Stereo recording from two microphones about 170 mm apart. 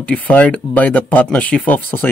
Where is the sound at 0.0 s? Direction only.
10° left (ahead or behind).